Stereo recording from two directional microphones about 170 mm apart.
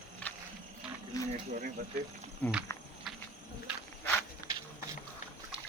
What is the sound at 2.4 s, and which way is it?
Speech, 10° left (ahead or behind).